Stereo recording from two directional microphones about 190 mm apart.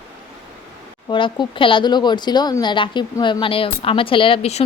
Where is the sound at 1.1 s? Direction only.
25° left (ahead or behind).